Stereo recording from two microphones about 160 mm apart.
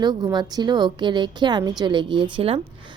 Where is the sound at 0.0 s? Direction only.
25° right (ahead or behind).